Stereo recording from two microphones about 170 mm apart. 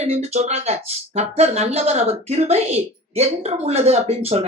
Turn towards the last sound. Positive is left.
turn(degrees=-35)  # may be behind; listen again after turning